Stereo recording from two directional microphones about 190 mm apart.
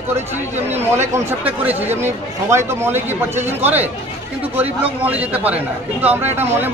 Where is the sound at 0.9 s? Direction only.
10° right (ahead or behind).